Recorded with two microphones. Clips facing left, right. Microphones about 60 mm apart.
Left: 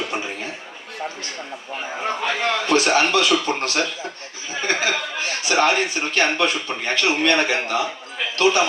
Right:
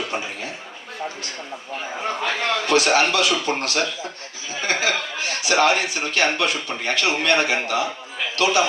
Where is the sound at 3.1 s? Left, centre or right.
Left.